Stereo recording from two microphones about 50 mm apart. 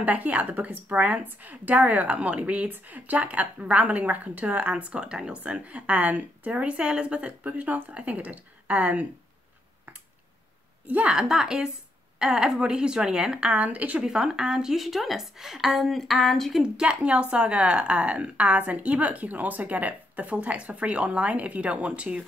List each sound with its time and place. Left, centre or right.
0.0 s a woman's voice: right
10.9 s speech: right
11.1 s a woman's voice: centre
13.5 s a woman's voice: right
14.0 s a woman's voice: centre
14.8 s a woman's voice: centre
16.7 s speech: centre